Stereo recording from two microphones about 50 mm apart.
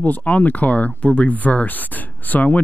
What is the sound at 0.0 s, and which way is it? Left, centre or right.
Speech, left.